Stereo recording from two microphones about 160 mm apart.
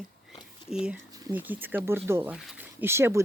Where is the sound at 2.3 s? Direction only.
5° right (ahead or behind).